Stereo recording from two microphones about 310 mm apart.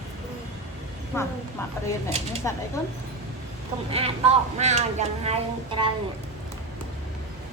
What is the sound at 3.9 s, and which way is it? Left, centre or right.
A woman's voice, centre.